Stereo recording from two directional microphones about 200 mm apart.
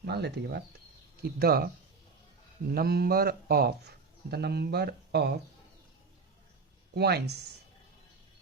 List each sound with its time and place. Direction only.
0.0 s a man's voice: 55° right (ahead or behind)
6.9 s speech: 55° right (ahead or behind)